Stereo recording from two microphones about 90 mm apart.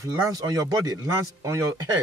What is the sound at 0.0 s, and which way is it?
Speech, 40° right (ahead or behind).